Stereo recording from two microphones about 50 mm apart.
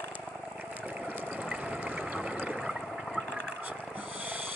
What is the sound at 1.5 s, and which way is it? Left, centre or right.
Water, right.